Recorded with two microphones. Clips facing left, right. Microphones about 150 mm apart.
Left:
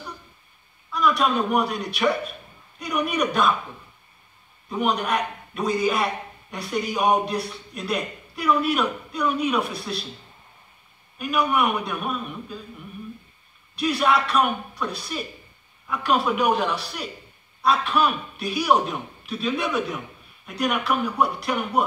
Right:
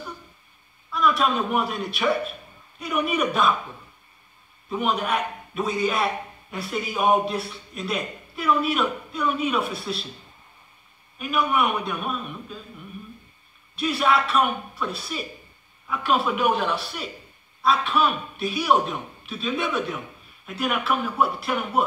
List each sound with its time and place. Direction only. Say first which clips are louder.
0.9 s a man's voice: left 1 dB; centre (ahead or behind)
4.6 s a man's voice: left 1 dB; 5° right (ahead or behind)
11.1 s a man's voice: left 1 dB; centre (ahead or behind)
13.7 s a man's voice: left 1 dB; centre (ahead or behind)